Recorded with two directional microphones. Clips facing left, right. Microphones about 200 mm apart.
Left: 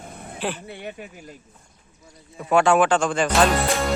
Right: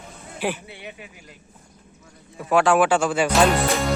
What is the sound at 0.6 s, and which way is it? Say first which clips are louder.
Speech: left 4 dB; 50° left (ahead or behind).